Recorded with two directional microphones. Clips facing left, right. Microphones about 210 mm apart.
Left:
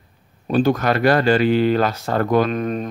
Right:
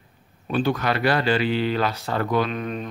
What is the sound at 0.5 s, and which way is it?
Speech, 45° left (ahead or behind).